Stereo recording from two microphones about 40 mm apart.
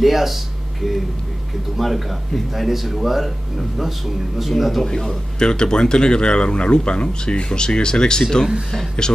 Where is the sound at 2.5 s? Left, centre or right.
Centre.